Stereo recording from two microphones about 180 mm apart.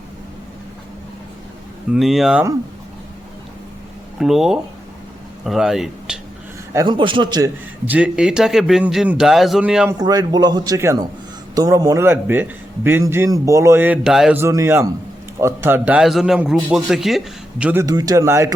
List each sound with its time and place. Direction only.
1.9 s a man's voice: centre (ahead or behind)
4.2 s a man's voice: centre (ahead or behind)
6.7 s a man's voice: 25° right (ahead or behind)
7.9 s a man's voice: 5° right (ahead or behind)
10.0 s a man's voice: 20° right (ahead or behind); by 14.3 s centre (ahead or behind)
14.3 s a man's voice: 15° right (ahead or behind)
17.8 s a man's voice: 20° right (ahead or behind)